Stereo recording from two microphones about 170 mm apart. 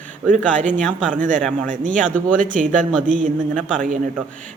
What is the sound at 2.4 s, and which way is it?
Speech, 50° right (ahead or behind).